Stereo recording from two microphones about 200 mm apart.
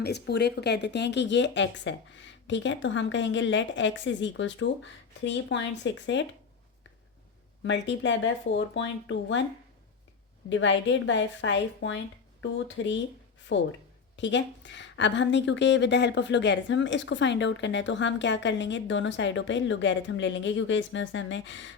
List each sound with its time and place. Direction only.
0.0 s a woman's voice: 55° left (ahead or behind)
7.6 s a woman's voice: 65° left (ahead or behind)
10.5 s a woman's voice: 65° left (ahead or behind)